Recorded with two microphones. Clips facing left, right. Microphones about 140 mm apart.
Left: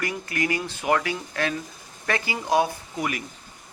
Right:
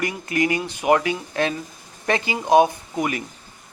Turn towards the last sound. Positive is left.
turn(degrees=-20)  # may be behind; listen again after turning